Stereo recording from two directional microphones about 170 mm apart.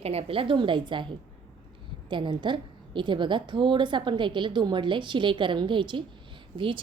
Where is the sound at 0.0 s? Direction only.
35° right (ahead or behind).